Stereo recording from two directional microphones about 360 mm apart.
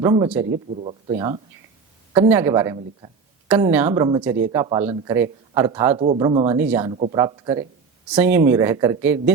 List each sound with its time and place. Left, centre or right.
0.0 s speech: centre